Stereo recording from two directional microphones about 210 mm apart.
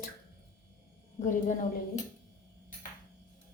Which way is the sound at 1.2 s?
35° left (ahead or behind).